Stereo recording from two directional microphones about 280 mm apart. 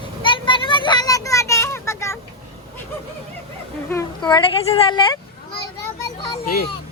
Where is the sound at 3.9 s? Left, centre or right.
Centre.